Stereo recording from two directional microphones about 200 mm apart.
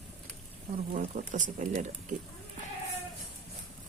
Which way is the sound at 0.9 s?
40° right (ahead or behind).